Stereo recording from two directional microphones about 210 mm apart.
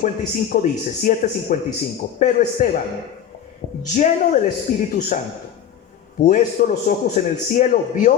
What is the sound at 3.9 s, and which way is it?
A man's voice, 35° left (ahead or behind).